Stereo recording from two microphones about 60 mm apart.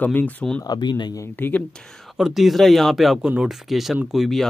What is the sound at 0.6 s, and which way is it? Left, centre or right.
Speech, left.